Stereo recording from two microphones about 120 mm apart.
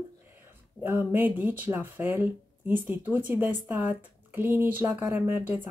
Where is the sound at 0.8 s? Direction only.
15° right (ahead or behind).